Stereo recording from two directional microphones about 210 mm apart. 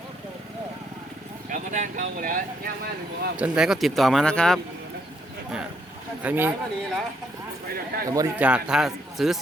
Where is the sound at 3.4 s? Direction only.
5° right (ahead or behind).